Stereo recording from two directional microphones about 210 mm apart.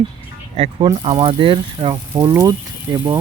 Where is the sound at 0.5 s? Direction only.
25° right (ahead or behind).